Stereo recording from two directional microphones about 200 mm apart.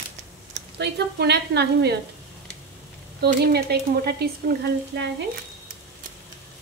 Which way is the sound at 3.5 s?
50° right (ahead or behind).